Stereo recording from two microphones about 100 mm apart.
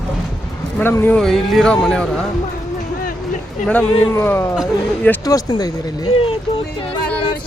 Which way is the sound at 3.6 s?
5° left (ahead or behind).